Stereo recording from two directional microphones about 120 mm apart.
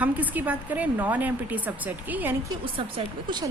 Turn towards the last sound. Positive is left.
turn(degrees=-40)  # may be behind; listen again after turning